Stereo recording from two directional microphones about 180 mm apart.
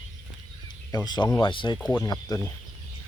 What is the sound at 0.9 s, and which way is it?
Speech, 20° left (ahead or behind).